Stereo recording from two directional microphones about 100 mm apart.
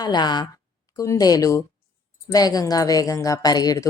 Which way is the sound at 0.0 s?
45° left (ahead or behind).